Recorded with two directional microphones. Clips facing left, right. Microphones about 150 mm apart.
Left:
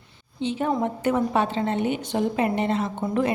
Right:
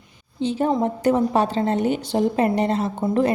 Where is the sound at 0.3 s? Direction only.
35° right (ahead or behind).